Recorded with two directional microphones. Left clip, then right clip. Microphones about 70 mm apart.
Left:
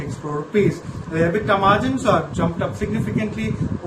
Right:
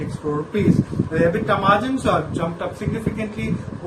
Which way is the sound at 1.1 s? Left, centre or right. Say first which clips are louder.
Left 1 dB; left.